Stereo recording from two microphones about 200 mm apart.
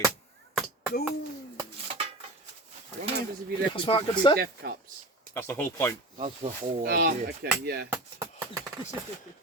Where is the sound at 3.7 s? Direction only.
25° left (ahead or behind).